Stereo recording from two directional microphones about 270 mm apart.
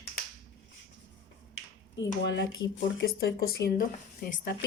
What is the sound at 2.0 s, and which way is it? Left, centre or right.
Speech, left.